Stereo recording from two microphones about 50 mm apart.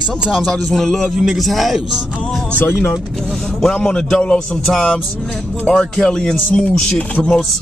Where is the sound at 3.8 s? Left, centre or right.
Centre.